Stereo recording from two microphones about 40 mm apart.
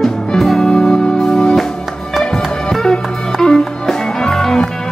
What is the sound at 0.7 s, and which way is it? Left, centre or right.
Music, centre.